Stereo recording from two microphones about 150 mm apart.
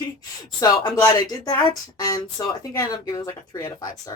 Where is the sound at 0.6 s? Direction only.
25° left (ahead or behind).